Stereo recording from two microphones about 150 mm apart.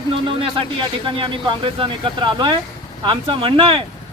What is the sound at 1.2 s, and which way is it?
Speech, 35° right (ahead or behind).